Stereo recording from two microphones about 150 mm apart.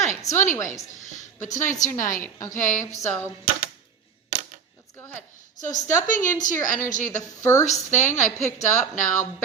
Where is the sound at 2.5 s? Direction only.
55° left (ahead or behind).